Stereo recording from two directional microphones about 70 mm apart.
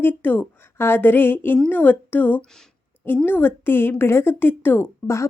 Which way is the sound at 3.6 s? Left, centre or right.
Left.